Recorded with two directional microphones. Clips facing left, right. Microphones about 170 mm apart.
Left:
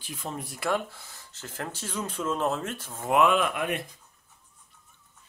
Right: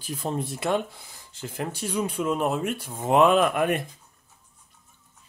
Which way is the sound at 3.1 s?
35° right (ahead or behind).